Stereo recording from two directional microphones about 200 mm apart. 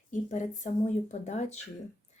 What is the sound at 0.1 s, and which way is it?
Speech, 40° left (ahead or behind).